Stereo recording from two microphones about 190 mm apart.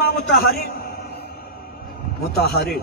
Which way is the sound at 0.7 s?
55° left (ahead or behind).